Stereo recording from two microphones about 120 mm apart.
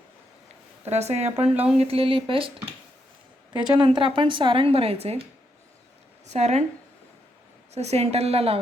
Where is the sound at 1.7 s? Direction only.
55° right (ahead or behind).